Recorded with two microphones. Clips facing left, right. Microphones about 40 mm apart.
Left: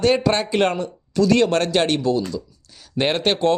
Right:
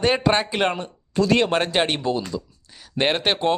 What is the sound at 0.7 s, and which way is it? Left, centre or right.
Speech, right.